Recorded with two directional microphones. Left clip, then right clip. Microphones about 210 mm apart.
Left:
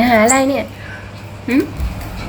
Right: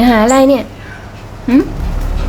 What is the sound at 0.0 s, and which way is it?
Speech, 30° right (ahead or behind).